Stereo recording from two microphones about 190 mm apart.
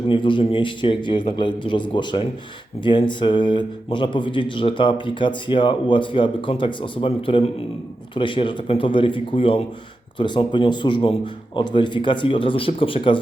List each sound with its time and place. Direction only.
0.1 s speech: 25° left (ahead or behind)